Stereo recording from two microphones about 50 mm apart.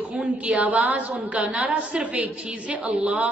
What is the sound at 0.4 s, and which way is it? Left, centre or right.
A woman's voice, right.